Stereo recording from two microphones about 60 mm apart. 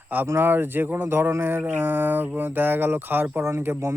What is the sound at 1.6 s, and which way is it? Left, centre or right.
Speech, right.